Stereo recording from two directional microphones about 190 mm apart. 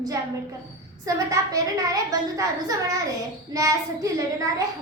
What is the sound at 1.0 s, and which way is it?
A woman's voice, 15° right (ahead or behind).